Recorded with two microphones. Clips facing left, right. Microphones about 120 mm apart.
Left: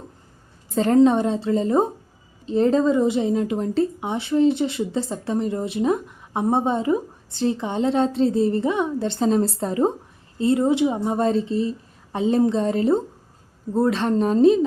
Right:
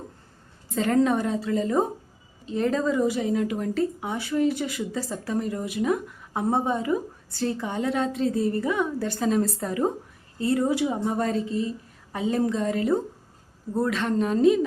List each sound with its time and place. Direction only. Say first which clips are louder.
0.9 s a woman's voice: left 6 dB; 25° left (ahead or behind)